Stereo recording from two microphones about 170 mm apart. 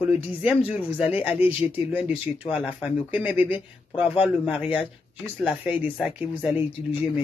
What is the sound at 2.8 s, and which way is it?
Speech, 10° right (ahead or behind).